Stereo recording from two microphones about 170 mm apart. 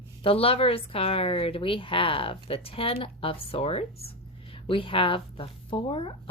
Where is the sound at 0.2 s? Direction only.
35° left (ahead or behind).